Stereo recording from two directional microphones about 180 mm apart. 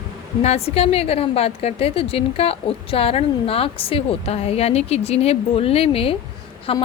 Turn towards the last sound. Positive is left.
turn(degrees=30)  # may be behind; listen again after turning